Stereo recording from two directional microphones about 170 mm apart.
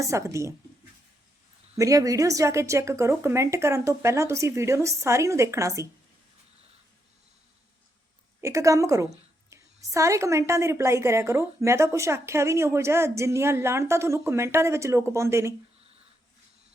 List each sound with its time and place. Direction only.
0.0 s a woman's voice: 15° right (ahead or behind)
1.7 s a woman's voice: 20° right (ahead or behind)
8.4 s a woman's voice: 15° right (ahead or behind)